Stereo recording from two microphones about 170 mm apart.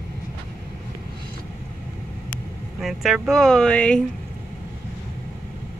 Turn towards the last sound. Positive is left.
turn(degrees=5)  # may be behind; listen again after turning